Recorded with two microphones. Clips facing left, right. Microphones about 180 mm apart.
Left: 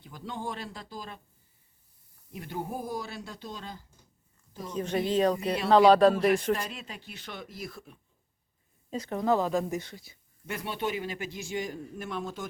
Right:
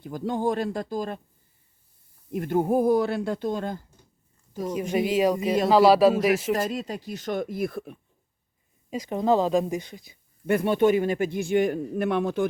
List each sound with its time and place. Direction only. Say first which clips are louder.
0.0 s speech: right 11 dB; 45° right (ahead or behind)
2.3 s speech: right 13 dB; 50° right (ahead or behind)
4.7 s speech: right 3 dB; 10° right (ahead or behind)
6.5 s speech: right 5 dB; 40° right (ahead or behind); by 7.9 s 60° right (ahead or behind)
8.9 s speech: right 4 dB; 15° right (ahead or behind)
10.4 s a man's voice: right 13 dB; 55° right (ahead or behind)